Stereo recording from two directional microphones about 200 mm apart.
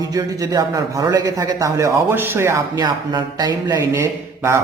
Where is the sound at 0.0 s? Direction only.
15° right (ahead or behind).